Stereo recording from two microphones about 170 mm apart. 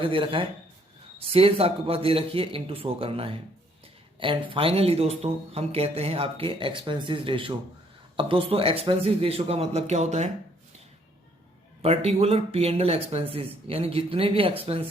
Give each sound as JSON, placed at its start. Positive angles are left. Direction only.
{"t": 0.0, "sound": "speech", "side_deg": -30}
{"t": 11.8, "sound": "speech", "side_deg": -35}